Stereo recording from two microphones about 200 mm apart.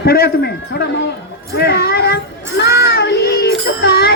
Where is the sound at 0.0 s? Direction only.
50° left (ahead or behind).